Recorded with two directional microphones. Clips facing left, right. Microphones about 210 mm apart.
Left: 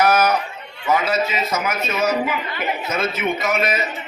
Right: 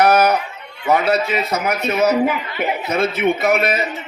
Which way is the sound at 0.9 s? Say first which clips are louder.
Right 3 dB; 65° right (ahead or behind).